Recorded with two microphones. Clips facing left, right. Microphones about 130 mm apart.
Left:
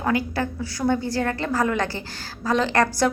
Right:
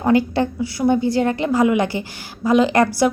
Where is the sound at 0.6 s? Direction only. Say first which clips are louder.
Right 5 dB; 15° right (ahead or behind).